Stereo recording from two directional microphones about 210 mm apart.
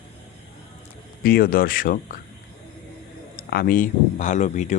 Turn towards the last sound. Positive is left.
turn(degrees=35)  # may be behind; listen again after turning